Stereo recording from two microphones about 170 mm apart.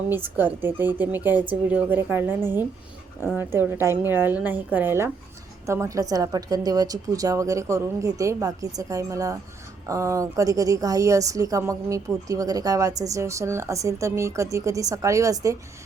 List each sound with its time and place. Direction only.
0.1 s a woman's voice: 10° right (ahead or behind)